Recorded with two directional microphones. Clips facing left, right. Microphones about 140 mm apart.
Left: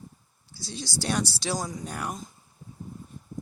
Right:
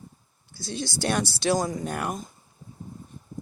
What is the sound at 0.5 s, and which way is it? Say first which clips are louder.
Speech: right 4 dB; 55° right (ahead or behind).